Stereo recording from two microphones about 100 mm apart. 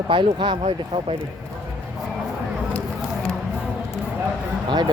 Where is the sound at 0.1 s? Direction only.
55° right (ahead or behind).